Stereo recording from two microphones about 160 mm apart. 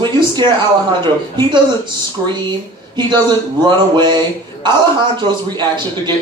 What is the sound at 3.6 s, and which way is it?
Speech, 30° right (ahead or behind).